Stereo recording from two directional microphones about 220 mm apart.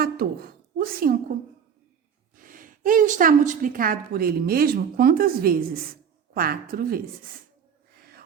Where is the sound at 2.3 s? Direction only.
40° right (ahead or behind).